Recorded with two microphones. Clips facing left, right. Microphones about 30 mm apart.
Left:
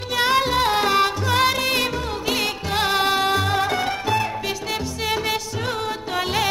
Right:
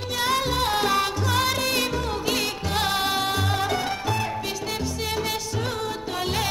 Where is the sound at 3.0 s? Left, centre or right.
Left.